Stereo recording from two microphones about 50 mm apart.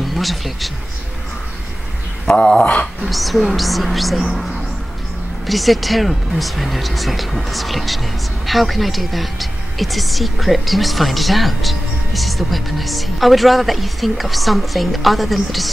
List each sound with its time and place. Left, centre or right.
0.1 s speech: centre
2.2 s speech: centre
3.0 s speech: centre
5.5 s speech: centre